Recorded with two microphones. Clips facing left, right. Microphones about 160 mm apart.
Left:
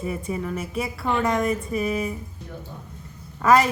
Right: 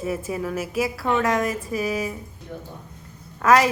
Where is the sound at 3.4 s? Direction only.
Centre (ahead or behind).